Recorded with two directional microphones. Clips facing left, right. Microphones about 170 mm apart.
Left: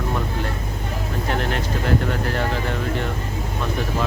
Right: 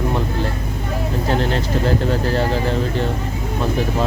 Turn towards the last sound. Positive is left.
turn(degrees=-30)  # may be behind; listen again after turning